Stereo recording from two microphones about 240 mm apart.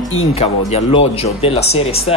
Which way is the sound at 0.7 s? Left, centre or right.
Left.